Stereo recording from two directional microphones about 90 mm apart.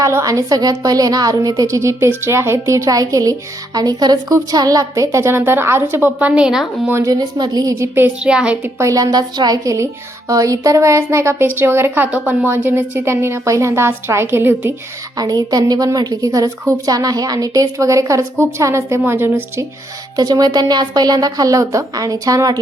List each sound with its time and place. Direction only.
0.0 s a woman's voice: 35° right (ahead or behind); by 6.7 s 5° right (ahead or behind)
7.0 s speech: 45° right (ahead or behind)
8.2 s a woman's voice: 10° right (ahead or behind)
8.6 s a woman's voice: 35° right (ahead or behind)
12.1 s a woman's voice: 15° right (ahead or behind)
15.2 s a woman's voice: 45° right (ahead or behind); by 19.6 s 25° right (ahead or behind)
20.1 s speech: 45° right (ahead or behind)